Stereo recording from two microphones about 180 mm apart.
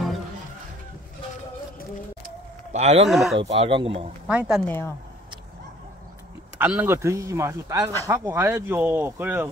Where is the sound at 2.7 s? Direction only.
40° right (ahead or behind).